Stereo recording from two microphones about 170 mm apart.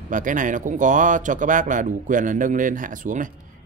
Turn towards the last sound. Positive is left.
turn(degrees=-50)  # may be behind; listen again after turning